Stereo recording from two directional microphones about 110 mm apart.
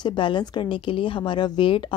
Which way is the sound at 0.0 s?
45° left (ahead or behind).